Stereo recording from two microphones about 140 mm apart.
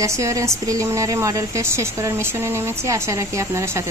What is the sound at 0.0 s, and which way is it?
Speech, 20° right (ahead or behind).